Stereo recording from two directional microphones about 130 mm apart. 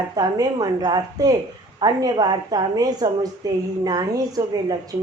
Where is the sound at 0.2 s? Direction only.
30° right (ahead or behind).